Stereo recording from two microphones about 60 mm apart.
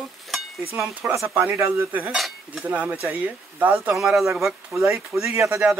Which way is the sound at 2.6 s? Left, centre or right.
Right.